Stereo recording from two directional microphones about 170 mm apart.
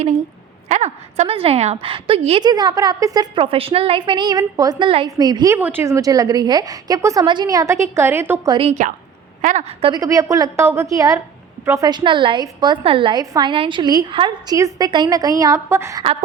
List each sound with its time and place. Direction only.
0.7 s a woman's voice: 40° right (ahead or behind); by 5.5 s 25° right (ahead or behind)
5.5 s a woman's voice: 10° right (ahead or behind)
8.5 s a woman's voice: 40° right (ahead or behind)
9.9 s a woman's voice: 20° right (ahead or behind)